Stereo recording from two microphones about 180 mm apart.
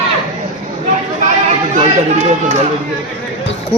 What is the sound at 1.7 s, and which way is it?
Speech, 40° right (ahead or behind).